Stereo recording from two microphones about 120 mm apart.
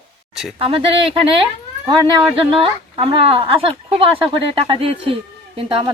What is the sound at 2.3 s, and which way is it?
A woman's voice, 45° right (ahead or behind).